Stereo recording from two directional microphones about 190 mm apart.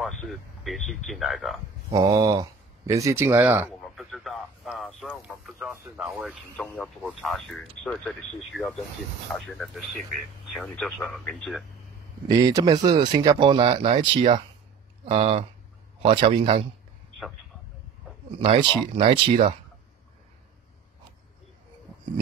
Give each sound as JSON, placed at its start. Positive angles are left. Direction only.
{"t": 0.0, "sound": "speech", "side_deg": 0}
{"t": 1.9, "sound": "speech", "side_deg": -20}
{"t": 9.3, "sound": "speech", "side_deg": 0}
{"t": 12.3, "sound": "speech", "side_deg": -20}
{"t": 18.4, "sound": "speech", "side_deg": -30}